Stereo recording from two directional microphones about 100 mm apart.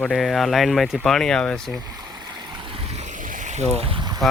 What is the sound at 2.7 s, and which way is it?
Vehicle, 85° right.